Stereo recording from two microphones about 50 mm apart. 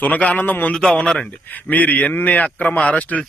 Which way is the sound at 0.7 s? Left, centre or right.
Centre.